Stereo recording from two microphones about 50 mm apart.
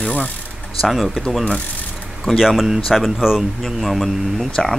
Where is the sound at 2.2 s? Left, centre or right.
Centre.